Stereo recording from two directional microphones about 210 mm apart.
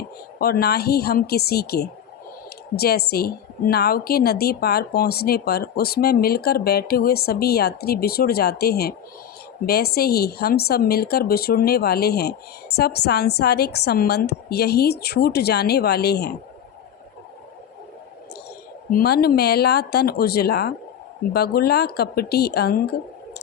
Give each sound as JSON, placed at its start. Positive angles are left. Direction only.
{"t": 0.3, "sound": "speech", "side_deg": 45}
{"t": 18.9, "sound": "speech", "side_deg": 45}